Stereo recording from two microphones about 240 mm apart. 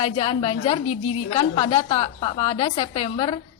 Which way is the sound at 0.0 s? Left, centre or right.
Left.